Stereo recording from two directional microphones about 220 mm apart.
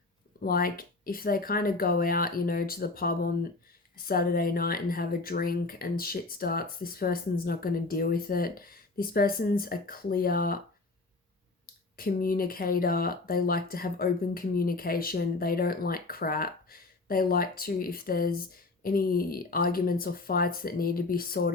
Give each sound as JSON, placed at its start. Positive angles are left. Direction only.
{"t": 0.3, "sound": "speech", "side_deg": 40}
{"t": 11.6, "sound": "speech", "side_deg": 40}